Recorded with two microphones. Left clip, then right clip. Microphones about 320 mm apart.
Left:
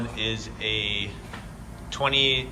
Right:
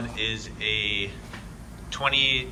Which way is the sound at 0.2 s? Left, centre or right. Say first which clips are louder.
Right 1 dB; centre.